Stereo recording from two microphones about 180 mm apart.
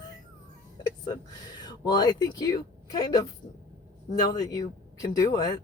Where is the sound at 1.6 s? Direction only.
20° left (ahead or behind).